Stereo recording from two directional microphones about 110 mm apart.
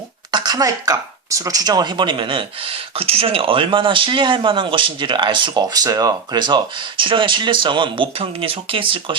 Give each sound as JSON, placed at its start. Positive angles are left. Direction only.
{"t": 0.3, "sound": "speech", "side_deg": -40}
{"t": 6.4, "sound": "speech", "side_deg": -45}